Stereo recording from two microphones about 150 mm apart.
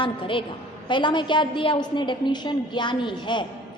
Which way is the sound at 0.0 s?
35° left (ahead or behind).